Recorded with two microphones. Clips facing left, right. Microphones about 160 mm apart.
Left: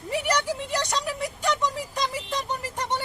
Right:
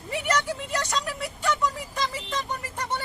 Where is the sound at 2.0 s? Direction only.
20° left (ahead or behind).